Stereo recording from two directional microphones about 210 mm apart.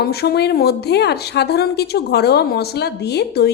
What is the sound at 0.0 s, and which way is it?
Speech, 50° left (ahead or behind).